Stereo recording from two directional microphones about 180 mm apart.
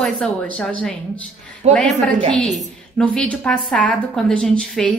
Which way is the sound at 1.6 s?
35° right (ahead or behind).